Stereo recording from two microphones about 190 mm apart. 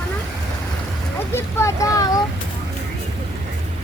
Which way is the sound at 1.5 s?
15° left (ahead or behind).